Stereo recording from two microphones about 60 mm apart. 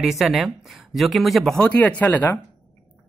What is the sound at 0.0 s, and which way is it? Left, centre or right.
Speech, centre.